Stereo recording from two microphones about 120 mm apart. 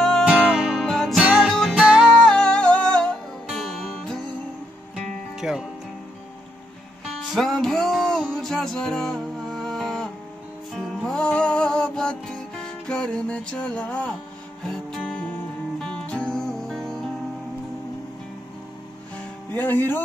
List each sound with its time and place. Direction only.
0.2 s music: 10° right (ahead or behind)
7.3 s music: 5° left (ahead or behind)
19.5 s music: 15° left (ahead or behind)